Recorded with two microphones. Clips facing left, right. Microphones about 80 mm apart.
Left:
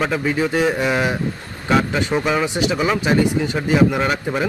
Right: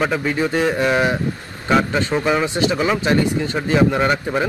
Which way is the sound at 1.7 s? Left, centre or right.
Centre.